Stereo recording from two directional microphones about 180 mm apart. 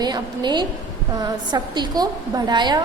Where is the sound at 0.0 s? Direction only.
25° right (ahead or behind).